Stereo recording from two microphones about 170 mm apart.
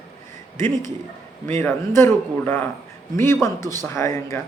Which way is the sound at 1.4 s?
15° left (ahead or behind).